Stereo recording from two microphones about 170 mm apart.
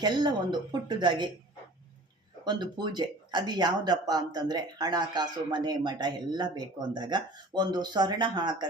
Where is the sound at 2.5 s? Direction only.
25° right (ahead or behind).